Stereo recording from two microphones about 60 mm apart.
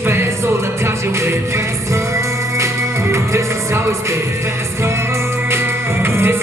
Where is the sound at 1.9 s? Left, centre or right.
Right.